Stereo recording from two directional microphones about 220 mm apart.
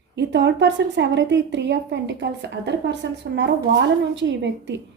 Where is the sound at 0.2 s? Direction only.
55° right (ahead or behind).